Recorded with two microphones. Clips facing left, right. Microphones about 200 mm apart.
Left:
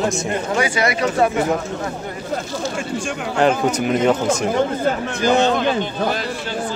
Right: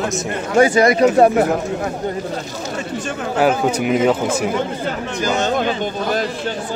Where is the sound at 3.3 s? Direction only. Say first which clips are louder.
Right 1 dB; 5° right (ahead or behind).